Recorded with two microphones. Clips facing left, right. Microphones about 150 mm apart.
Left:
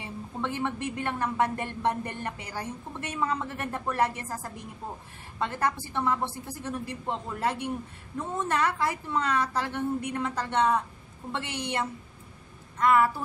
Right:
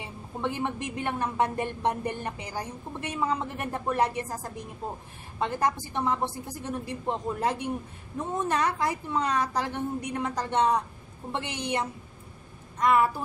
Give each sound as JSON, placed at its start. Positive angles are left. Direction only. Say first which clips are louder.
{"t": 0.0, "sound": "a woman's voice", "louder": "right 1 dB", "side_deg": -15}